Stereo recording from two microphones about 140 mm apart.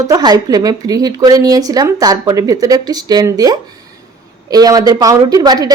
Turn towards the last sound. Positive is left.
turn(degrees=-25)  # may be behind; listen again after turning